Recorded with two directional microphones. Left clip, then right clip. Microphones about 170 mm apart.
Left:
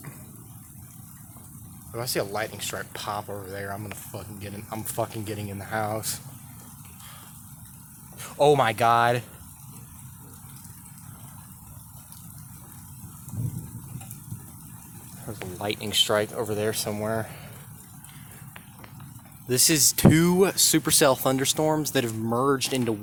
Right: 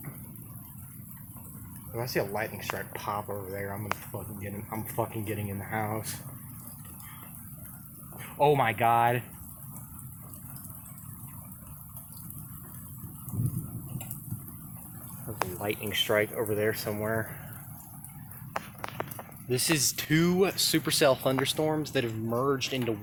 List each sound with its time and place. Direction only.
1.9 s speech: 30° left (ahead or behind)
8.2 s speech: 45° left (ahead or behind)
15.4 s speech: 25° left (ahead or behind)
19.5 s speech: 35° left (ahead or behind)